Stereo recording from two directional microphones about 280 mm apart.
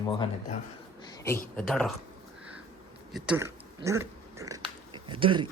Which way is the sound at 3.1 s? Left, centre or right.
Centre.